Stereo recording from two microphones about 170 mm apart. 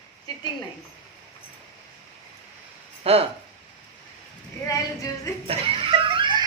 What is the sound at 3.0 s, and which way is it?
Speech, 35° right (ahead or behind).